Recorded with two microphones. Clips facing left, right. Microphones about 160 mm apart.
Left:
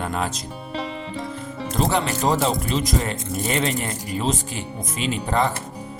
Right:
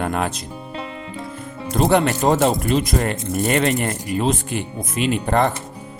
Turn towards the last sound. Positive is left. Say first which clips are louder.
# right 4 dB
turn(degrees=-55)  # may be behind; listen again after turning